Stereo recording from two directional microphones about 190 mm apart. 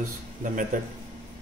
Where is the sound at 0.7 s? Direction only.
45° right (ahead or behind).